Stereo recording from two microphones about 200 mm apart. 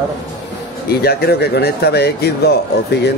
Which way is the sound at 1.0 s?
50° left (ahead or behind).